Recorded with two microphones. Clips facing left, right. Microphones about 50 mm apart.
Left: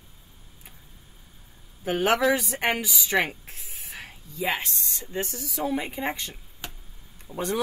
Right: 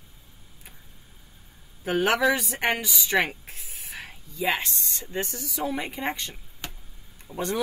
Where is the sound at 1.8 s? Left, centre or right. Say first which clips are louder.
Even; centre.